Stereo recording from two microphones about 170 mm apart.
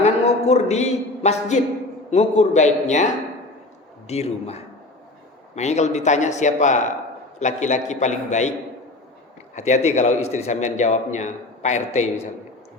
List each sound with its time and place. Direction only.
0.0 s a man's voice: 40° left (ahead or behind)
9.6 s a man's voice: 45° left (ahead or behind)